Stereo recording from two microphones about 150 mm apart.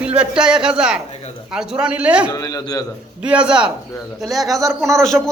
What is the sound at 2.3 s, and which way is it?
Speech, 25° left (ahead or behind).